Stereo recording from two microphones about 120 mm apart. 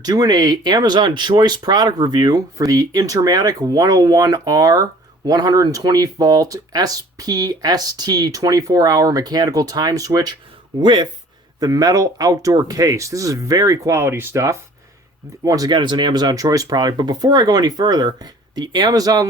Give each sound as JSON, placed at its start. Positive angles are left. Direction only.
{"t": 0.0, "sound": "speech", "side_deg": -35}